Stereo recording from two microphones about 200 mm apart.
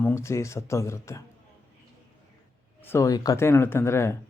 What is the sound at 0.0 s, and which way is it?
Speech, 15° left (ahead or behind).